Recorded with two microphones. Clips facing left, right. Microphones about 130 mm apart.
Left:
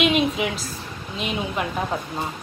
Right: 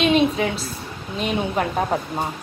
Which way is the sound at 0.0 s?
35° right (ahead or behind).